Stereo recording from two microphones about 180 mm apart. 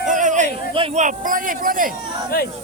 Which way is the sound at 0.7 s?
30° right (ahead or behind).